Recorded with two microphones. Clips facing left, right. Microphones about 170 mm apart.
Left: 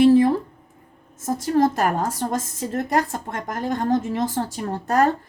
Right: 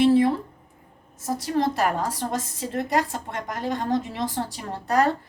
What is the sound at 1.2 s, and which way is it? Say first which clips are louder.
A woman's voice: left 5 dB; 45° left (ahead or behind).